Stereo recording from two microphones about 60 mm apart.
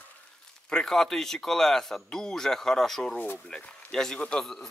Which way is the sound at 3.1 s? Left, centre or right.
Left.